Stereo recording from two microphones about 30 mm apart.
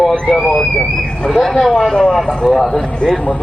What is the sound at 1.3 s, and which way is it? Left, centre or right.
Speech, centre.